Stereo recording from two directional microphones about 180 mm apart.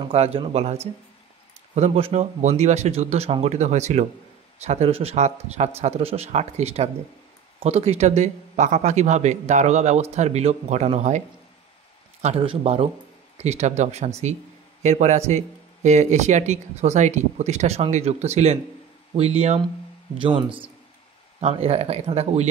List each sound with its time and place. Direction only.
0.0 s speech: 35° right (ahead or behind)
1.8 s a man's voice: 35° right (ahead or behind)